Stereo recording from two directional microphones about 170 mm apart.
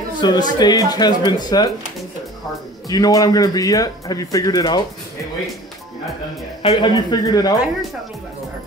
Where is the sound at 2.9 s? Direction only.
20° left (ahead or behind).